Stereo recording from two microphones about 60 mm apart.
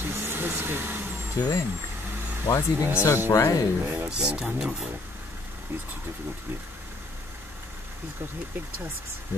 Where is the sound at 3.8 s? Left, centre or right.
Right.